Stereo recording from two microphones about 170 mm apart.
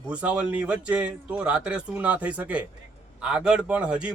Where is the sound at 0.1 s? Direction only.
5° right (ahead or behind).